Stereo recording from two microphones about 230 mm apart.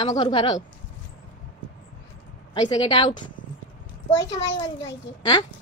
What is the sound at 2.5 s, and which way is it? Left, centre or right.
Speech, left.